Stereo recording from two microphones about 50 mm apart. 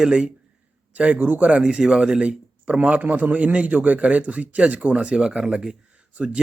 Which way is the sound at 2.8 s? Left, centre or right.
Right.